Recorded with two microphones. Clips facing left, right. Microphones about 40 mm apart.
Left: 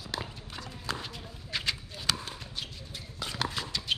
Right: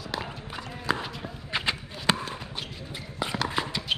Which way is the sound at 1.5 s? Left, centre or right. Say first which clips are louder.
Right 4 dB; right.